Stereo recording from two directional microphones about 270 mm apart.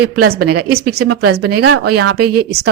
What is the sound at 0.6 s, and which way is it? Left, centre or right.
Speech, right.